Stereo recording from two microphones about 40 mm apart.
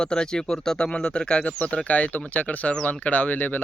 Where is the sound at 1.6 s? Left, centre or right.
Left.